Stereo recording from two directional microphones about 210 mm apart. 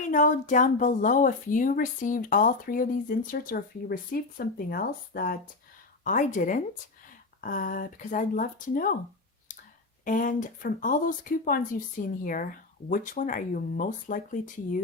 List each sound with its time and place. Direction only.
0.1 s speech: 35° left (ahead or behind)
10.0 s speech: 40° left (ahead or behind)